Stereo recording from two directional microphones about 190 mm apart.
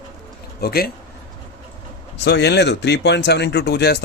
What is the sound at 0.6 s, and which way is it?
Speech, 55° left (ahead or behind).